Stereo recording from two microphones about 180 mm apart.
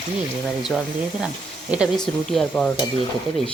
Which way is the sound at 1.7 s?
5° right (ahead or behind).